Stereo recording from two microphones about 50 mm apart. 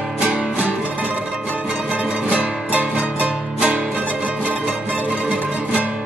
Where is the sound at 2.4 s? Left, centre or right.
Right.